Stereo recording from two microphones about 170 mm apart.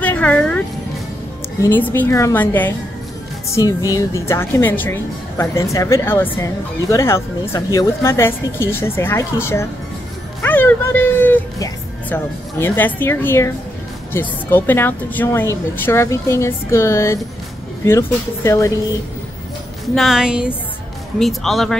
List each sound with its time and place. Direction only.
0.0 s music: 10° left (ahead or behind)
1.6 s a woman's voice: 10° left (ahead or behind)
20.0 s a woman's voice: 5° right (ahead or behind)